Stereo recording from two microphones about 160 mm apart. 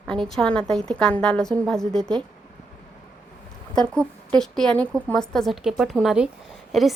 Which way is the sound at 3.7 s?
5° left (ahead or behind).